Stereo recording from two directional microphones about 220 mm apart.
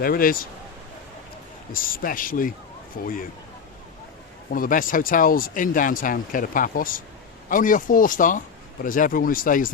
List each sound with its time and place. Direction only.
0.0 s speech: 40° left (ahead or behind)
1.7 s speech: 40° left (ahead or behind)
4.5 s speech: 40° left (ahead or behind)